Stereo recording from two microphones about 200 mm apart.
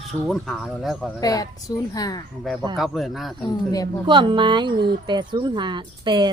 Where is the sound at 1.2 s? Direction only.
20° left (ahead or behind).